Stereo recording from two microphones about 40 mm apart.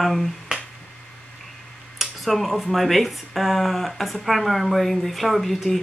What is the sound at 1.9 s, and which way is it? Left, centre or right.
Speech, centre.